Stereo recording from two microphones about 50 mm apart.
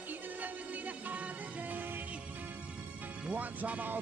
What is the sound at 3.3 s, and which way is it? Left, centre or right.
Speech, right.